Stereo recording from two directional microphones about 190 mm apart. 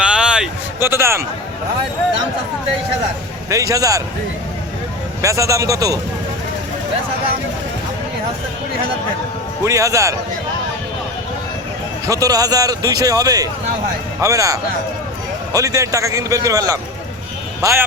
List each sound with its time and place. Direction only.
0.0 s a sound: 5° right (ahead or behind)
3.5 s a man's voice: 15° right (ahead or behind)
5.2 s a man's voice: 15° right (ahead or behind)
9.6 s a man's voice: 15° right (ahead or behind)
12.0 s a man's voice: 20° right (ahead or behind)